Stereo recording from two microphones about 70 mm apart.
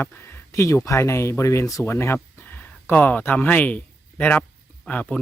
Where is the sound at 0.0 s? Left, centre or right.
Left.